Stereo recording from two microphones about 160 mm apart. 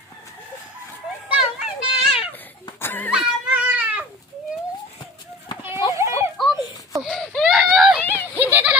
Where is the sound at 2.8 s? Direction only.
10° left (ahead or behind).